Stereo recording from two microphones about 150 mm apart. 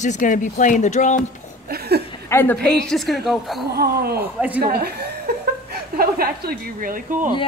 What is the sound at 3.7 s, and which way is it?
A woman's voice, 90° right.